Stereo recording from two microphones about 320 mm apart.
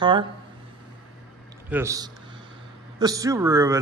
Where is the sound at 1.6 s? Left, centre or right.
Centre.